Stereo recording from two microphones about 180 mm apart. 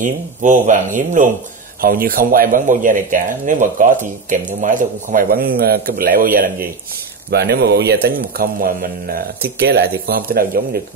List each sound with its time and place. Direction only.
0.0 s speech: 45° right (ahead or behind)
7.2 s speech: 65° right (ahead or behind)